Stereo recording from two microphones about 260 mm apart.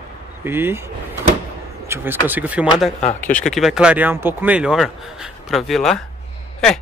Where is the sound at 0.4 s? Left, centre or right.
Centre.